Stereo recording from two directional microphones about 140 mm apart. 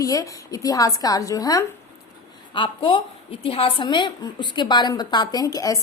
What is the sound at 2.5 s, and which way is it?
A woman's voice, 35° left (ahead or behind).